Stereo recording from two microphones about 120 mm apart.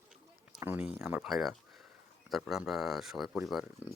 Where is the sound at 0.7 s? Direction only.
5° right (ahead or behind).